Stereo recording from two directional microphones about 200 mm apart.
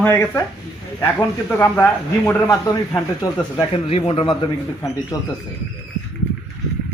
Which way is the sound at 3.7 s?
30° left (ahead or behind).